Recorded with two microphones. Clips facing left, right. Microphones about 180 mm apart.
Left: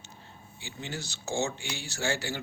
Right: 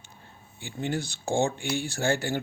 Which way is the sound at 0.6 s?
55° right (ahead or behind).